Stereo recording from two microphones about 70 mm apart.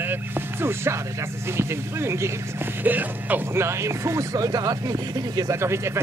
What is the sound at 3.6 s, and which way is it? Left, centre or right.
Speech, right.